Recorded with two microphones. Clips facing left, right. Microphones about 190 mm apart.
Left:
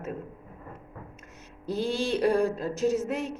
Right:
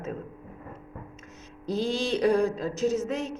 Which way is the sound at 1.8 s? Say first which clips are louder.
Even; 55° left (ahead or behind).